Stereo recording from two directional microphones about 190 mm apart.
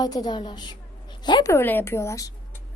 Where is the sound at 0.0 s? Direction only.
20° left (ahead or behind).